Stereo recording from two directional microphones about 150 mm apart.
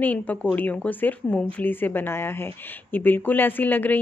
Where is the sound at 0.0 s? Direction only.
10° left (ahead or behind).